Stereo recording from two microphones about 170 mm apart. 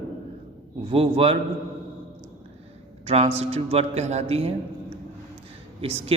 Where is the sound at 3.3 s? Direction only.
35° right (ahead or behind).